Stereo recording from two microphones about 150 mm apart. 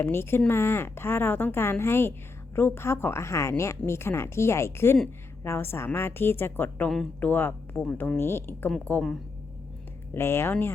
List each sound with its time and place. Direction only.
0.0 s a woman's voice: 15° left (ahead or behind)
10.2 s a woman's voice: 15° left (ahead or behind)